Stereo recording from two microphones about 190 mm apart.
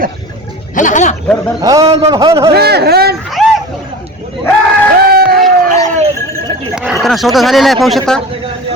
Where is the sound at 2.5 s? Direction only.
55° right (ahead or behind).